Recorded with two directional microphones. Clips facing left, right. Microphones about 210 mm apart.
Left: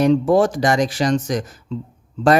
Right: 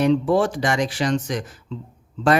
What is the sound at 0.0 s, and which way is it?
Speech, 45° left (ahead or behind).